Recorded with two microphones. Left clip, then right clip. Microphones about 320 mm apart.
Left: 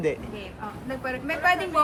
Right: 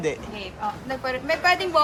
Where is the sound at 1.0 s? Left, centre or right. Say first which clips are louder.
Right 2 dB; right.